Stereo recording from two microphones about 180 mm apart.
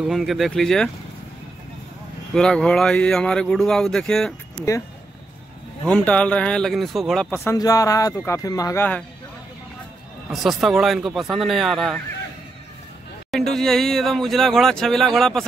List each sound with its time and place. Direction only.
0.0 s speech: centre (ahead or behind)
2.3 s speech: 5° left (ahead or behind)
5.9 s speech: 5° left (ahead or behind)
7.2 s speech: 15° left (ahead or behind)
10.3 s speech: centre (ahead or behind)
13.3 s speech: centre (ahead or behind)